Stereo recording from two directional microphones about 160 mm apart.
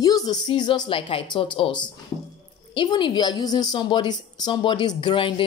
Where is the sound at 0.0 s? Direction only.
25° left (ahead or behind).